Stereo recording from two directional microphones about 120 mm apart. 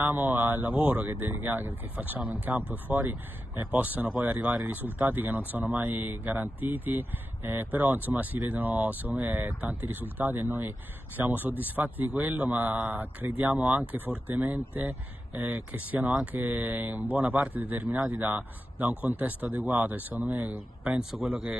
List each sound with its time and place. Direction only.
0.0 s speech: 15° right (ahead or behind)